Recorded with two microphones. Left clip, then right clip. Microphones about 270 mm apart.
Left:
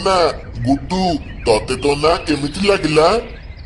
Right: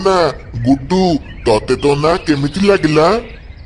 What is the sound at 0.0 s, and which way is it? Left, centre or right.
Speech, right.